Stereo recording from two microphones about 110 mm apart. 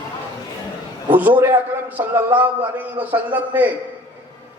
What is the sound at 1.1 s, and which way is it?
A man's voice, 15° right (ahead or behind).